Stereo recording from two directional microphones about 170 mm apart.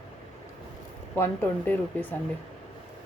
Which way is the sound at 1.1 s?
15° left (ahead or behind).